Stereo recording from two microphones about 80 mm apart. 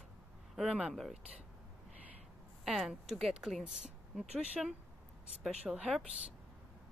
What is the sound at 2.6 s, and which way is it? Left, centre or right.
Speech, centre.